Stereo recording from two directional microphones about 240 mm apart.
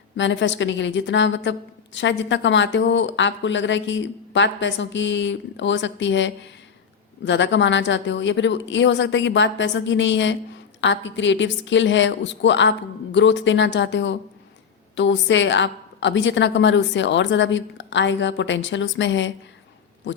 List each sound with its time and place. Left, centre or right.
0.2 s a woman's voice: left